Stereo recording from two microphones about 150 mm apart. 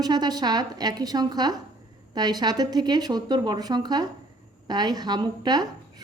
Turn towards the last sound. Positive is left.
turn(degrees=-30)  # may be behind; listen again after turning